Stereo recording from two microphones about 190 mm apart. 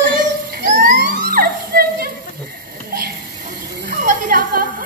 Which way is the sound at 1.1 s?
50° right (ahead or behind).